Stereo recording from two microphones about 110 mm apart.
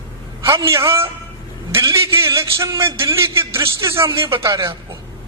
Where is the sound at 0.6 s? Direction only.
25° right (ahead or behind).